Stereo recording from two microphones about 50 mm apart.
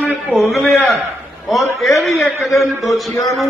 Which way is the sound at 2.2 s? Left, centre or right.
Centre.